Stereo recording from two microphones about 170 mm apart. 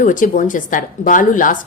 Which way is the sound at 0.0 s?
50° left (ahead or behind).